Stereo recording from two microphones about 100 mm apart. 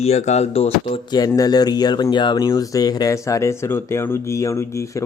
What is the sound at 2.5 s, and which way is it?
Speech, 40° left (ahead or behind).